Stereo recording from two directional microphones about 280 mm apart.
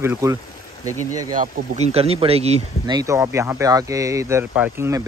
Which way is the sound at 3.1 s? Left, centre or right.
Centre.